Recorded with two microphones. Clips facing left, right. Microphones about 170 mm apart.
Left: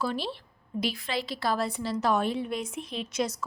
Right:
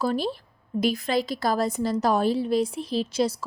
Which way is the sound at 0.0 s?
40° right (ahead or behind).